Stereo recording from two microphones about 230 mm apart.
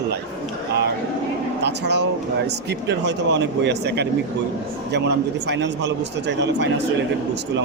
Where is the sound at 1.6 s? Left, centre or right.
Right.